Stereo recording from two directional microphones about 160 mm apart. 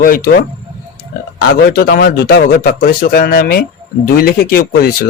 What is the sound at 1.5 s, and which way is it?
A man's voice, 75° left (ahead or behind).